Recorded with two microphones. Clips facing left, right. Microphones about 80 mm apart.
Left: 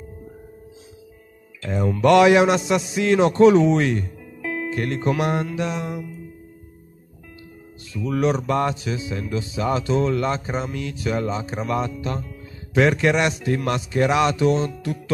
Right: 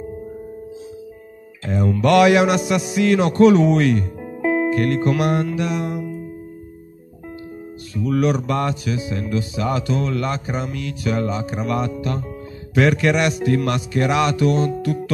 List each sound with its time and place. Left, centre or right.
1.7 s mantra: centre
3.7 s speech: centre
4.2 s music: right
4.7 s mantra: left
8.1 s mantra: left